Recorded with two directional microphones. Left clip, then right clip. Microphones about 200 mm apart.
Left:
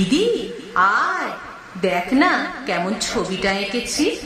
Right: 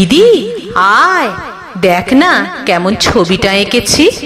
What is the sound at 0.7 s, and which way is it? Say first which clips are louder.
A woman's voice: right 10 dB; 45° right (ahead or behind).